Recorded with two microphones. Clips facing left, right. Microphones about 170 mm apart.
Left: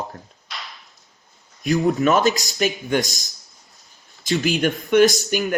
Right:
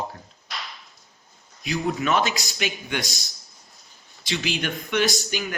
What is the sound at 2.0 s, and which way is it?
Speech, 40° left (ahead or behind).